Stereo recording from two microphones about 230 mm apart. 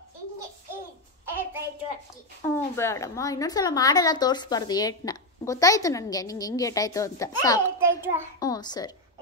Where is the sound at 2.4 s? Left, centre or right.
Centre.